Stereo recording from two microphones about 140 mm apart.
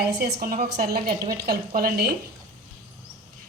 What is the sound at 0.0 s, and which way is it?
A woman's voice, 90° right.